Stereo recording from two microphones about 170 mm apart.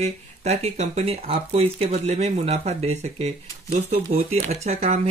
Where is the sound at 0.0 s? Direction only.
40° right (ahead or behind).